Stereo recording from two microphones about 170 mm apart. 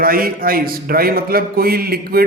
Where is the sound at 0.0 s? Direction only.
60° right (ahead or behind).